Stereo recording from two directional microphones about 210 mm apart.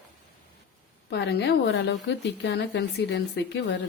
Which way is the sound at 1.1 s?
50° left (ahead or behind).